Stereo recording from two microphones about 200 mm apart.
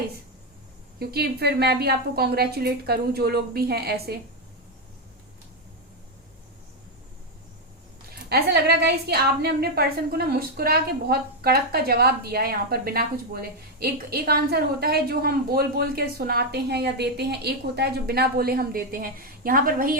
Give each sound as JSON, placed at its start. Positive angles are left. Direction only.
{"t": 0.9, "sound": "a woman's voice", "side_deg": -50}
{"t": 8.1, "sound": "a woman's voice", "side_deg": -50}